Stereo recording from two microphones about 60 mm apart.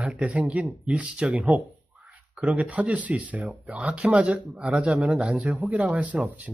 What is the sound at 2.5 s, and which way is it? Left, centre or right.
Speech, right.